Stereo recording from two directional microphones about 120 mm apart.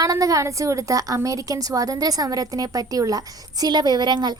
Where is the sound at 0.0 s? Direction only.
30° right (ahead or behind).